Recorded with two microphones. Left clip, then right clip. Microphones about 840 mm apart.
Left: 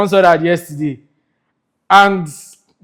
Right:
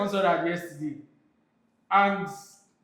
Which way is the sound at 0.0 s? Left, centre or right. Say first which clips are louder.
Left 14 dB; left.